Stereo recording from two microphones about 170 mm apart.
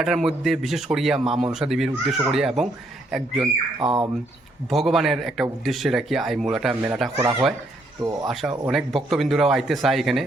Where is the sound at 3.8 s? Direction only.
30° right (ahead or behind).